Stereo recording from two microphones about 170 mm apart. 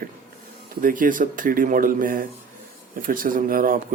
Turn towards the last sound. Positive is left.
turn(degrees=-55)  # may be behind; listen again after turning